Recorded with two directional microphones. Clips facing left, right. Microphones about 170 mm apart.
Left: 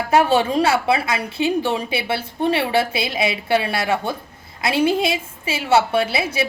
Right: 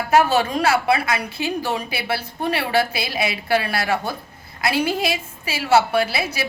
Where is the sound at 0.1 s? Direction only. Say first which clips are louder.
Left 1 dB; 25° left (ahead or behind).